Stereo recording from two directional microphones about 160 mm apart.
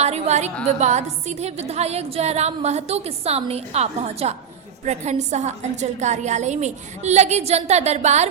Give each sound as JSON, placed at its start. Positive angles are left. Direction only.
{"t": 0.0, "sound": "a woman's voice", "side_deg": -45}